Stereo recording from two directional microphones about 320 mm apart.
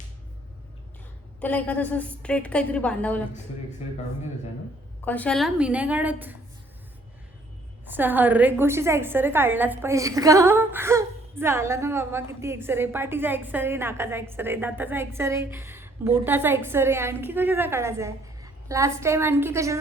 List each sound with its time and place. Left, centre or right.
1.4 s a woman's voice: centre
5.0 s a woman's voice: centre
7.9 s a woman's voice: centre